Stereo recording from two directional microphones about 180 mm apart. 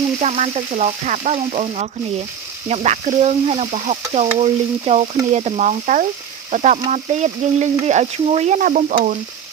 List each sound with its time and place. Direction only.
0.2 s speech: 40° right (ahead or behind)